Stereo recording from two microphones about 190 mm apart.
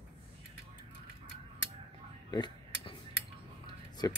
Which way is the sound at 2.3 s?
20° left (ahead or behind).